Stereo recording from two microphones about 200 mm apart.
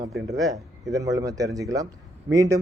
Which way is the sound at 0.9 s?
15° right (ahead or behind).